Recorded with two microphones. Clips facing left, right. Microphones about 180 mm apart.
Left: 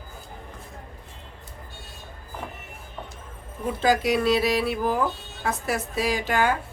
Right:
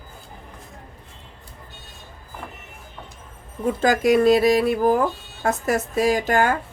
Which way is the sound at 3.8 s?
45° right (ahead or behind).